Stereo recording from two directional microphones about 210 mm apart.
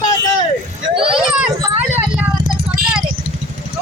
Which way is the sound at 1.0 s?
5° right (ahead or behind).